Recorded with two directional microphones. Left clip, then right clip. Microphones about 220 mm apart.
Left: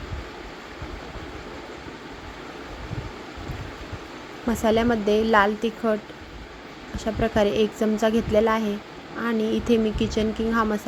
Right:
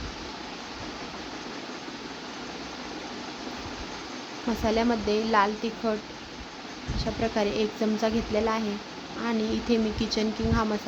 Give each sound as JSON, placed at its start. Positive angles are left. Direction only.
{"t": 4.6, "sound": "speech", "side_deg": 15}
{"t": 7.2, "sound": "speech", "side_deg": 15}